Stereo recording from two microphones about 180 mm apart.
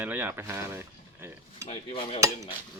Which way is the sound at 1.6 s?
35° left (ahead or behind).